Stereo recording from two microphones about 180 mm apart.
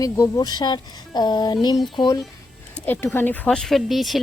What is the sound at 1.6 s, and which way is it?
Music, 25° left (ahead or behind).